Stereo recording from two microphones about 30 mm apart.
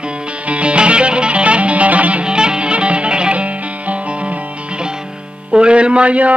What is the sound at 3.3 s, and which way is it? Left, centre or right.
Music, right.